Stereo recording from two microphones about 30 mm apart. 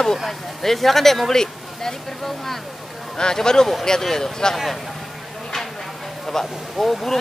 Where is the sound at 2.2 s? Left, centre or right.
Centre.